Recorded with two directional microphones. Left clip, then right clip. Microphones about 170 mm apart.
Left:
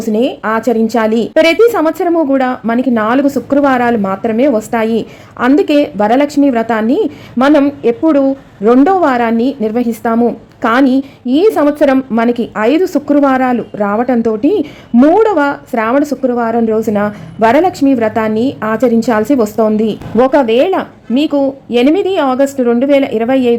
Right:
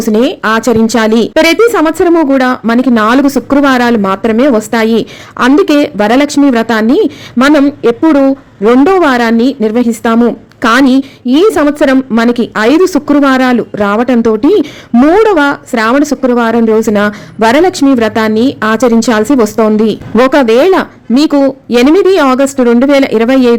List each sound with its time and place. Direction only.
0.0 s a woman's voice: 20° right (ahead or behind)